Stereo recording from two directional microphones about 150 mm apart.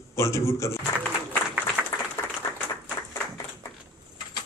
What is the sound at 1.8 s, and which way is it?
Applause, 10° right (ahead or behind).